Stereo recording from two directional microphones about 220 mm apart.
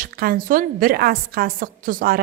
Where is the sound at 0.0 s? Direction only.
40° right (ahead or behind).